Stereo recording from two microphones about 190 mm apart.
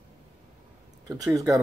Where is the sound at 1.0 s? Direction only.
20° right (ahead or behind).